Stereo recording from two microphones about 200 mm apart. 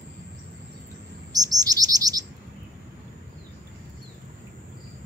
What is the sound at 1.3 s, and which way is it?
Chirp, 20° right (ahead or behind).